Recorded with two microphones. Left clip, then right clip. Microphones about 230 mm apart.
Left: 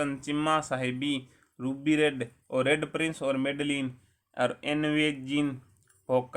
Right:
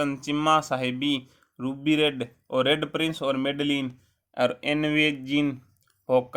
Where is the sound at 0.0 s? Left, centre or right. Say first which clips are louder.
Right 4 dB; right.